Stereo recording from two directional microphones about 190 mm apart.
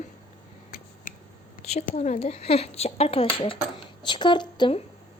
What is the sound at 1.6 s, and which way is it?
Speech, 35° left (ahead or behind).